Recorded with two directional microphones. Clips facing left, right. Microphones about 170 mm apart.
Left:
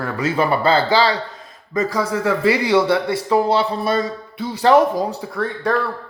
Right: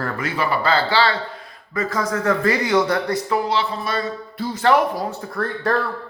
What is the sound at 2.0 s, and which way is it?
A man's voice, 10° left (ahead or behind).